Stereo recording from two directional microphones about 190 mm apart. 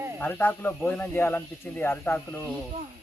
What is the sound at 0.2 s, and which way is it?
A man's voice, 10° left (ahead or behind).